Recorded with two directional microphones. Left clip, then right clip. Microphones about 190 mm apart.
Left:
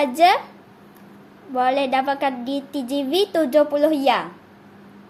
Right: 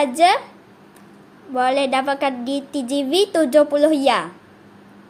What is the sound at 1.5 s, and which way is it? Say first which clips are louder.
A woman's voice: right 1 dB; 15° right (ahead or behind).